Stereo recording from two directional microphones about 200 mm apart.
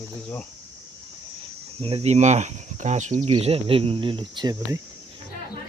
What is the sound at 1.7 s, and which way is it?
Speech, 30° right (ahead or behind).